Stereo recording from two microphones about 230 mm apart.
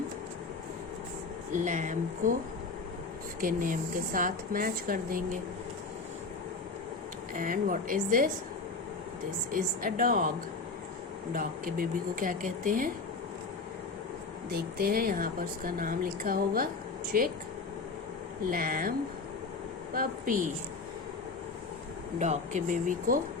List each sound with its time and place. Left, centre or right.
1.5 s speech: right
3.4 s speech: right
7.3 s speech: right
9.5 s speech: right
11.3 s speech: right
14.5 s speech: right
18.5 s speech: right
22.2 s speech: right